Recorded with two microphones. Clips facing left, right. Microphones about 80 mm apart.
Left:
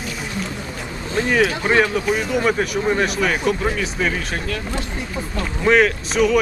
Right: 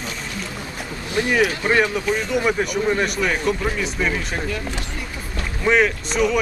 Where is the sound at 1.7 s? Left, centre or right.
Centre.